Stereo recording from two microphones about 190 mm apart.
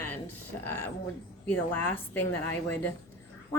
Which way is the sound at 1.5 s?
10° left (ahead or behind).